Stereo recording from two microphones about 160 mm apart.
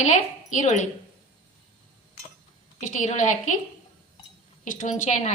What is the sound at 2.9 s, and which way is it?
Speech, 50° left (ahead or behind).